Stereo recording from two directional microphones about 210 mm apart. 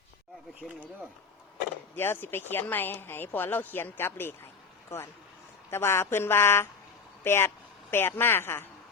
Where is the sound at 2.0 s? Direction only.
10° left (ahead or behind).